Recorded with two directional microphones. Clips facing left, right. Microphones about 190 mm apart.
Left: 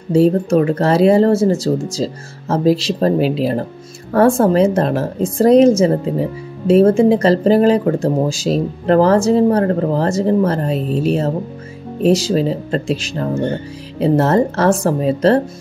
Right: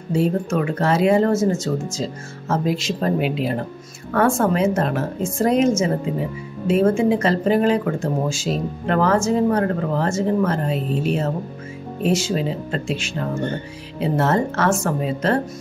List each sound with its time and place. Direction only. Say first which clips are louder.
0.1 s speech: left 8 dB; 35° left (ahead or behind)